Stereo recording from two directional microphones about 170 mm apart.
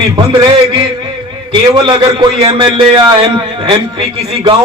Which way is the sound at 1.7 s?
25° right (ahead or behind).